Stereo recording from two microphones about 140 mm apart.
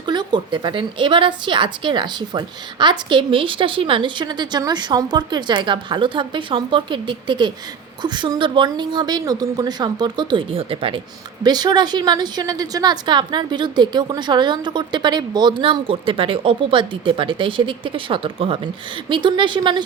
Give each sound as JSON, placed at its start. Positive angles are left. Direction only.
{"t": 0.0, "sound": "a woman's voice", "side_deg": -35}